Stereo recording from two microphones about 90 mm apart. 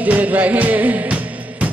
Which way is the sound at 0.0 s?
15° right (ahead or behind).